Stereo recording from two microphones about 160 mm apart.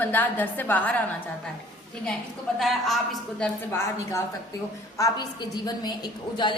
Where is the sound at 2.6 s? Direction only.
Centre (ahead or behind).